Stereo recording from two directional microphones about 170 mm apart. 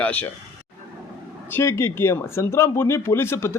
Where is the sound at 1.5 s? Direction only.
15° left (ahead or behind).